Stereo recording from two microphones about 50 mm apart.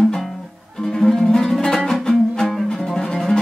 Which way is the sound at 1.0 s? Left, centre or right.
Centre.